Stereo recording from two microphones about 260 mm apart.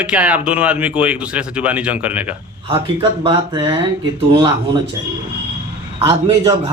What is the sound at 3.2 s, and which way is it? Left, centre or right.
Speech, centre.